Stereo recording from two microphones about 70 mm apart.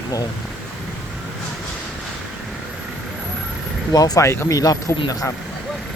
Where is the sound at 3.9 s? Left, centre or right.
Left.